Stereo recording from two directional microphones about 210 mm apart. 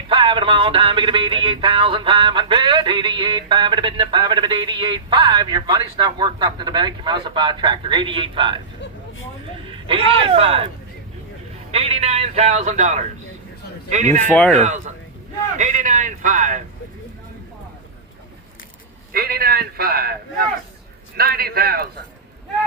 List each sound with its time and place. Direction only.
0.1 s speech: 25° right (ahead or behind)
9.6 s a man's voice: 25° right (ahead or behind)
11.7 s speech: 30° right (ahead or behind)
14.3 s speech: 5° left (ahead or behind)
14.6 s speech: 35° right (ahead or behind)
19.1 s a man's voice: 45° right (ahead or behind)